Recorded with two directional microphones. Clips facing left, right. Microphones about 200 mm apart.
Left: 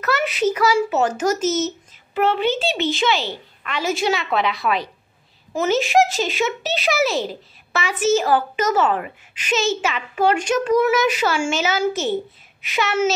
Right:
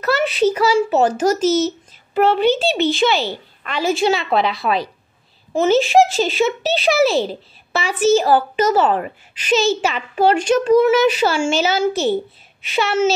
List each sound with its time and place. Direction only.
0.0 s a child's voice: 30° right (ahead or behind)